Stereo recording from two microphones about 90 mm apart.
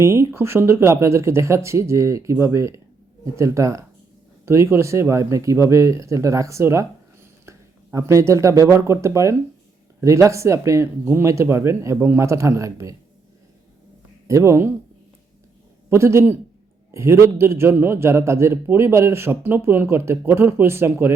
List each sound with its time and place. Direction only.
0.0 s speech: 30° right (ahead or behind)
14.3 s speech: 35° right (ahead or behind)
15.9 s a man's voice: 30° right (ahead or behind)